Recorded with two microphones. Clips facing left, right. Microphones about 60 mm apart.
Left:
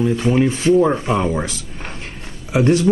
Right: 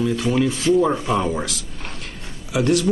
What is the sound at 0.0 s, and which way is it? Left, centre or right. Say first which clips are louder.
Speech: left 3 dB; left.